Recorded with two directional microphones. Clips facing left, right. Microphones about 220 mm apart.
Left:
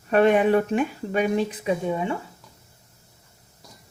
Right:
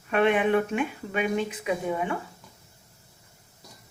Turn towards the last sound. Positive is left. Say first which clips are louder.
# left 3 dB
turn(degrees=25)  # may be behind; listen again after turning